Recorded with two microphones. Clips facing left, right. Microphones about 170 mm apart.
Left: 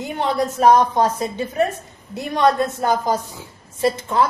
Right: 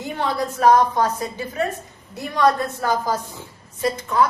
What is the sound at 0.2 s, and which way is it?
A woman's voice, 20° left (ahead or behind).